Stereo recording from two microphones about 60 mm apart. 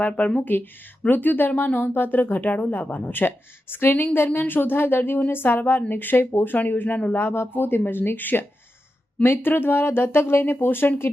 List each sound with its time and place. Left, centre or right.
0.3 s speech: left